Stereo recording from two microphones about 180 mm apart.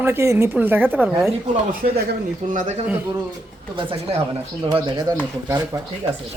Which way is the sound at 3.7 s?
30° right (ahead or behind).